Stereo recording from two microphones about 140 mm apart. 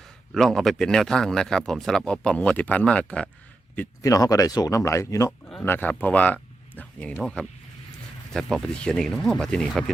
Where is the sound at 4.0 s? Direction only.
25° left (ahead or behind).